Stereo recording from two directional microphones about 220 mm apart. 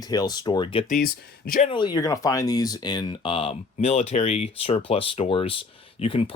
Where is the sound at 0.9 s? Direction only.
40° left (ahead or behind).